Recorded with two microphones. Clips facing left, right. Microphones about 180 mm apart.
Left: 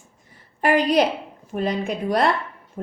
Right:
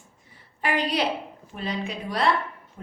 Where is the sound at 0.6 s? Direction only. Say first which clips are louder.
Left 7 dB; 45° left (ahead or behind).